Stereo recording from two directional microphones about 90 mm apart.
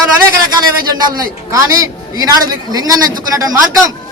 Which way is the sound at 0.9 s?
40° right (ahead or behind).